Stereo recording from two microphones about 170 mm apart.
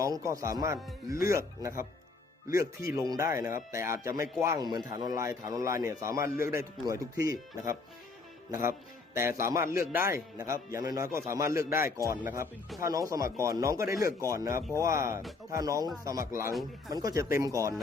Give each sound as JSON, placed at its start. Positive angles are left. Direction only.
{"t": 0.0, "sound": "speech", "side_deg": -20}
{"t": 9.1, "sound": "speech", "side_deg": -15}
{"t": 16.9, "sound": "speech", "side_deg": -20}